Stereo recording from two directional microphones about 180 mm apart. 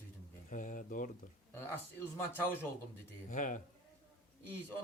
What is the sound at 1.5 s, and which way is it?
A man's voice, 10° left (ahead or behind).